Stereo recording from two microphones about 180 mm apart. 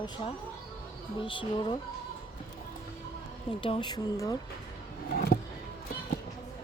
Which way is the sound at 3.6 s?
30° left (ahead or behind).